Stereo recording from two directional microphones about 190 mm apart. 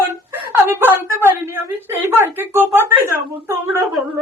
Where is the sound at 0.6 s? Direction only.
15° right (ahead or behind).